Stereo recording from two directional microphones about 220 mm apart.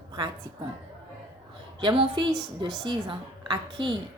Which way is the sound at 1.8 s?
20° right (ahead or behind).